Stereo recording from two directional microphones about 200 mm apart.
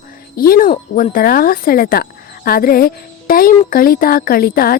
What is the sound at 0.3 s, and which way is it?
Speech, 45° left (ahead or behind).